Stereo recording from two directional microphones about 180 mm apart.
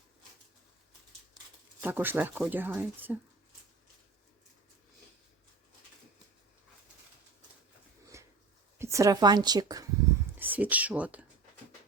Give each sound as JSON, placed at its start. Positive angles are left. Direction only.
{"t": 1.8, "sound": "speech", "side_deg": -10}
{"t": 8.1, "sound": "a sound", "side_deg": -15}
{"t": 8.8, "sound": "a woman's voice", "side_deg": -15}
{"t": 10.3, "sound": "speech", "side_deg": -10}